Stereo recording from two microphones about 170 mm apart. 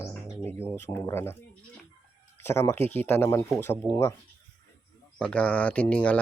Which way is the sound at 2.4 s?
15° left (ahead or behind).